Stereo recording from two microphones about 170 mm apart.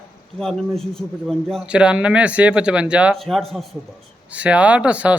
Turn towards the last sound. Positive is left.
turn(degrees=-5)  # may be behind; listen again after turning